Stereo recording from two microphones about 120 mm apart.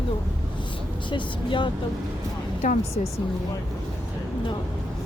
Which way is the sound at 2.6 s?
85° left.